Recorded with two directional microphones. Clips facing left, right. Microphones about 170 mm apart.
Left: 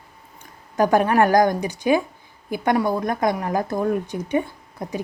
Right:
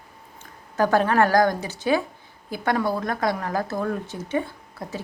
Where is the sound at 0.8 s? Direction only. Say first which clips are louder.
Left 2 dB; 15° left (ahead or behind).